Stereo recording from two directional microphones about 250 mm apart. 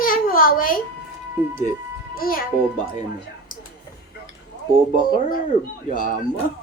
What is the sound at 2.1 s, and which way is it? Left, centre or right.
Speech, left.